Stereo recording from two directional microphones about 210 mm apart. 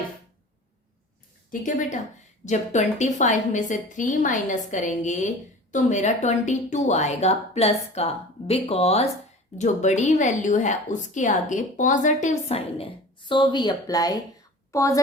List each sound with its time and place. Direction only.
1.5 s a woman's voice: 40° left (ahead or behind); by 15.0 s 15° left (ahead or behind)